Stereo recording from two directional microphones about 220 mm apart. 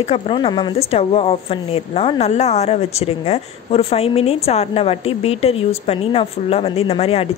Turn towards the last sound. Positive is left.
turn(degrees=25)  # may be behind; listen again after turning